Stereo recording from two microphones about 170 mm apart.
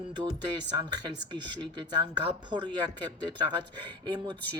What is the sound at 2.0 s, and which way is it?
Speech, 25° right (ahead or behind).